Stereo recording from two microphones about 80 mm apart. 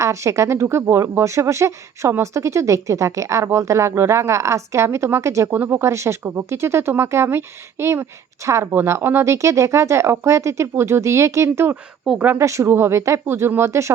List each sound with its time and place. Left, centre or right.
0.0 s speech: right